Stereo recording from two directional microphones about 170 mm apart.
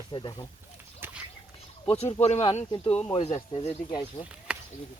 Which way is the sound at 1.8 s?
35° left (ahead or behind).